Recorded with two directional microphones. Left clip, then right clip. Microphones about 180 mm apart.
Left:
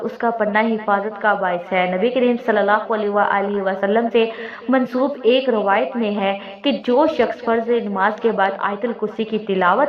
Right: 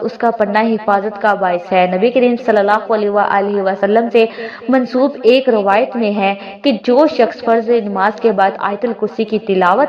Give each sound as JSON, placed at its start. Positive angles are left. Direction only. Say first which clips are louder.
{"t": 0.0, "sound": "a woman's voice", "louder": "right 5 dB", "side_deg": -30}